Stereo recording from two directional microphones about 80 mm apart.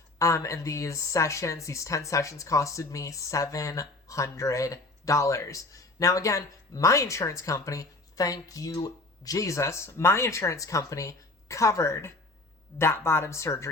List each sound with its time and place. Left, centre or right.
0.2 s speech: left